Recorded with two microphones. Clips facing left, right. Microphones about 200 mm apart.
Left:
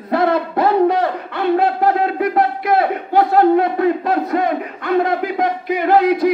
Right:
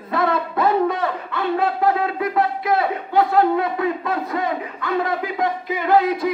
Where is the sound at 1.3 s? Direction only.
65° left (ahead or behind).